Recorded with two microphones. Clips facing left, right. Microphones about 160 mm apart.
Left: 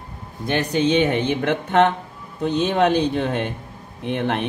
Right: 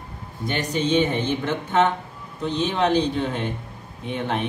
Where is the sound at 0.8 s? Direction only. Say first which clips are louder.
Left 2 dB; 70° left (ahead or behind).